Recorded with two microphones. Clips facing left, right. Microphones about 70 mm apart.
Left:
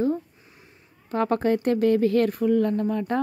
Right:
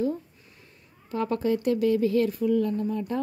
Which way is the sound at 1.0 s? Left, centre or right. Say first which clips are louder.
Left 4 dB; left.